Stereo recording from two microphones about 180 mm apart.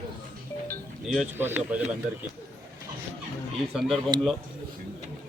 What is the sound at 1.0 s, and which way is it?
Speech, 5° right (ahead or behind).